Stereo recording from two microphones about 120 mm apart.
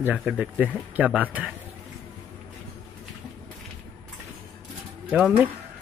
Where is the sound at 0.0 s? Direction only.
10° right (ahead or behind).